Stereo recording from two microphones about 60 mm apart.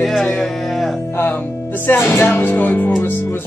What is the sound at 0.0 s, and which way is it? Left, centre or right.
Music, centre.